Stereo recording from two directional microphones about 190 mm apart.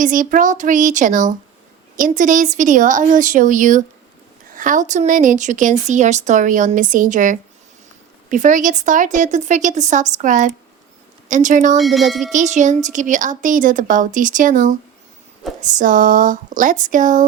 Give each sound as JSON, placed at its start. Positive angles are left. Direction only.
{"t": 0.0, "sound": "speech", "side_deg": -45}
{"t": 11.8, "sound": "wind chime", "side_deg": 0}
{"t": 12.3, "sound": "speech", "side_deg": -40}